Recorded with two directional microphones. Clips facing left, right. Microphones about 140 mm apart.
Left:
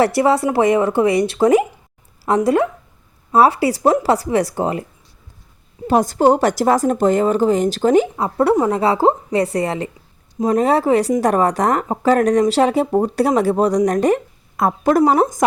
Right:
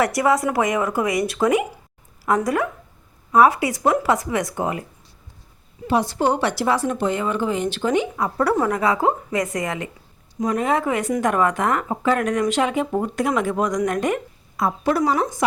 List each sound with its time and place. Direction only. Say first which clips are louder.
0.0 s a woman's voice: left 4 dB; 30° left (ahead or behind)
5.9 s speech: left 6 dB; 45° left (ahead or behind)
8.1 s a woman's voice: left 5 dB; 25° left (ahead or behind)
14.5 s speech: left 5 dB; 50° left (ahead or behind)
15.0 s speech: left 6 dB; 40° left (ahead or behind)